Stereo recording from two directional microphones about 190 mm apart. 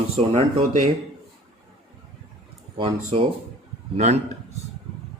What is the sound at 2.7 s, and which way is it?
A man's voice, 25° right (ahead or behind).